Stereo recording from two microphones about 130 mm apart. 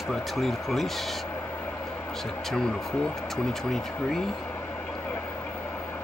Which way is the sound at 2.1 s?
Centre (ahead or behind).